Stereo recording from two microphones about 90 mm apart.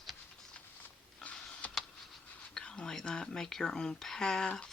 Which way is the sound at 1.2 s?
15° left (ahead or behind).